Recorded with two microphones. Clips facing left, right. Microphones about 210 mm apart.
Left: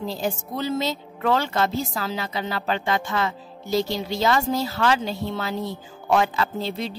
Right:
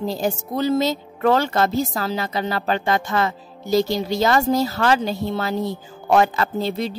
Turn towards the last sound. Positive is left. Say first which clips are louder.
# right 4 dB
turn(degrees=-45)  # may be behind; listen again after turning